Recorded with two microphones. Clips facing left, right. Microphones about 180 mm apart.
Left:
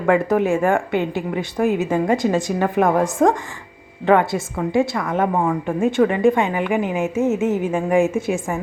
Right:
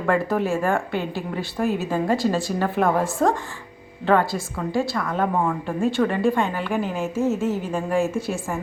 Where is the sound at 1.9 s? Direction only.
20° left (ahead or behind).